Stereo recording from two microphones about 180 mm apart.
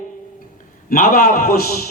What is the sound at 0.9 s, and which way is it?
Speech, 50° left (ahead or behind).